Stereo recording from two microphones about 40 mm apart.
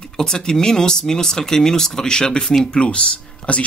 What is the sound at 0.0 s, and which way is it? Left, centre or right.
Speech, centre.